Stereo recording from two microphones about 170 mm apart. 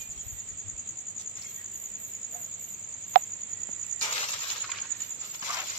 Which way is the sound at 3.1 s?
60° right (ahead or behind).